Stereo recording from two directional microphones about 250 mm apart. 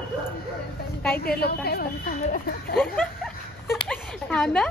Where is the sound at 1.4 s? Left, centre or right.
Left.